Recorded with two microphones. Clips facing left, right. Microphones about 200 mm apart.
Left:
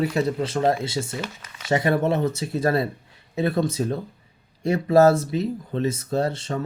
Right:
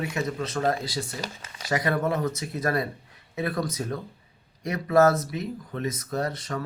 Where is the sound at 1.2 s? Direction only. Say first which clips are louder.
Left 2 dB; 35° right (ahead or behind).